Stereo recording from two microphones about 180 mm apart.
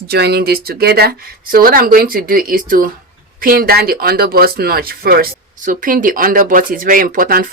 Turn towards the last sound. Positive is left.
turn(degrees=-50)  # may be behind; listen again after turning